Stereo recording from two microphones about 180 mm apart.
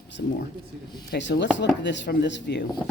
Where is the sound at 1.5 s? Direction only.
80° left.